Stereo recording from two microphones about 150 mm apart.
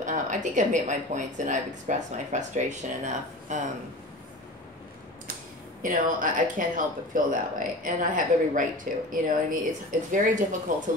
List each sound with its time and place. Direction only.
0.0 s speech: 55° right (ahead or behind)
5.8 s speech: 60° right (ahead or behind)